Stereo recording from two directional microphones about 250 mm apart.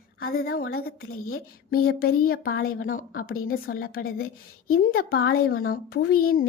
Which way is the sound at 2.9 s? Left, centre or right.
Left.